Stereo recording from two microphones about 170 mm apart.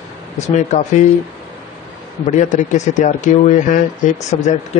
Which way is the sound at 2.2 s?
45° left (ahead or behind).